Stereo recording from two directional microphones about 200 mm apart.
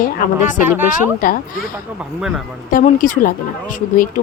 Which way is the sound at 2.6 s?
40° left (ahead or behind).